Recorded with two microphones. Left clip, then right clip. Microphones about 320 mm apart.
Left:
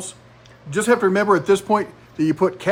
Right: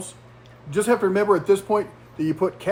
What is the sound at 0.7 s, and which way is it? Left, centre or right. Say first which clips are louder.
Speech: left 3 dB; left.